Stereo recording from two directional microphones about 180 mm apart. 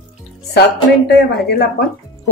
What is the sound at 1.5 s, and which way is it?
Speech, 65° left (ahead or behind).